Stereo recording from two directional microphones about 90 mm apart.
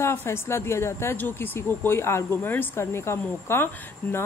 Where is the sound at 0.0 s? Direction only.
30° left (ahead or behind).